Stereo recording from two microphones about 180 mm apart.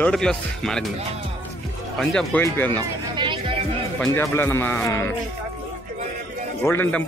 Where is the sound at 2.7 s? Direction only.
25° right (ahead or behind).